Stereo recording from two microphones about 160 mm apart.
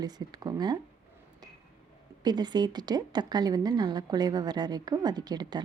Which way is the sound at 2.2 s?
25° right (ahead or behind).